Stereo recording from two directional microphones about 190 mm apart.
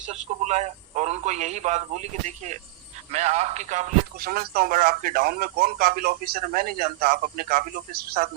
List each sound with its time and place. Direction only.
0.4 s a man's voice: 35° right (ahead or behind); by 8.3 s 50° right (ahead or behind)